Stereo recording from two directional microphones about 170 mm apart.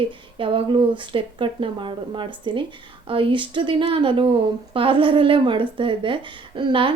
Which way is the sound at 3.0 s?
30° right (ahead or behind).